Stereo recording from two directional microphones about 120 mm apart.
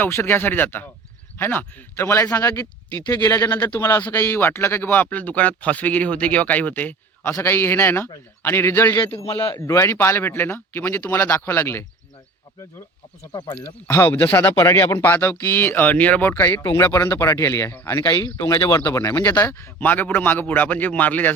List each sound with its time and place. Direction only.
0.0 s speech: 20° left (ahead or behind)
13.3 s speech: 35° left (ahead or behind)
13.6 s speech: 15° left (ahead or behind)